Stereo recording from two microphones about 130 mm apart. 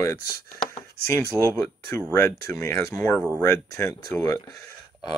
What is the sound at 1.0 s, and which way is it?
Speech, 20° left (ahead or behind).